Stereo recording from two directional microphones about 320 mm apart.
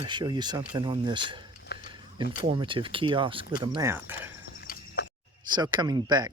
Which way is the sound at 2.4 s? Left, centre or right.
Centre.